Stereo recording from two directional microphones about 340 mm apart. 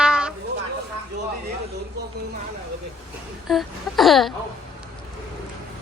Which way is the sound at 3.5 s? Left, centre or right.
Centre.